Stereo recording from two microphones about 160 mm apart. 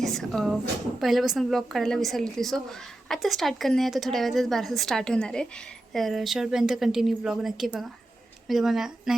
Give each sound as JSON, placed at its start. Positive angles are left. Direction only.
{"t": 0.0, "sound": "a woman's voice", "side_deg": 0}